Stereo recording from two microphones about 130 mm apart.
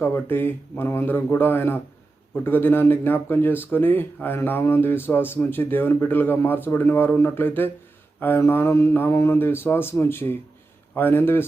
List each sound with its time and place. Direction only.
0.0 s speech: 15° left (ahead or behind)